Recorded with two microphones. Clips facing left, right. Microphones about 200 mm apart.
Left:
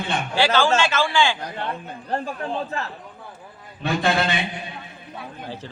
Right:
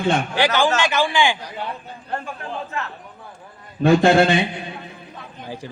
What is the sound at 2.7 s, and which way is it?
Speech, 35° left (ahead or behind).